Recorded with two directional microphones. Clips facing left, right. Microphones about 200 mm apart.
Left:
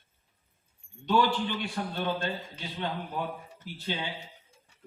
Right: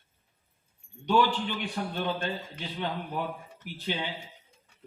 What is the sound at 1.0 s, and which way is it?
A man's voice, 15° right (ahead or behind).